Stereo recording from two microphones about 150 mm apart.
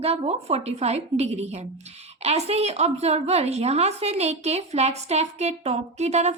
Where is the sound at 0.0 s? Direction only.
45° right (ahead or behind).